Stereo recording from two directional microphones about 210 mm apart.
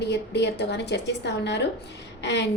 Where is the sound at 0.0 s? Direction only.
55° left (ahead or behind).